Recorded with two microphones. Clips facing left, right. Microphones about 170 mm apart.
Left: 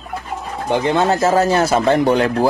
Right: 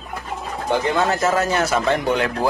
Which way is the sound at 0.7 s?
25° left (ahead or behind).